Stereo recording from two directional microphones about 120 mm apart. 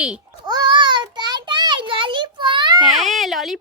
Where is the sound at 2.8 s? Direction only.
Centre (ahead or behind).